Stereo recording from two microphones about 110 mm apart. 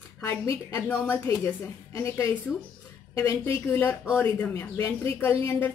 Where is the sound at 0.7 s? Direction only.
20° left (ahead or behind).